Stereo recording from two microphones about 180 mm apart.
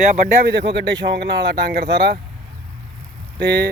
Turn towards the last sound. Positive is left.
turn(degrees=-70)  # may be behind; listen again after turning